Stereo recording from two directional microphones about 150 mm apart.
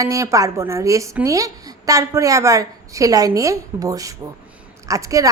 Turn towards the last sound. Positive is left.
turn(degrees=-20)  # may be behind; listen again after turning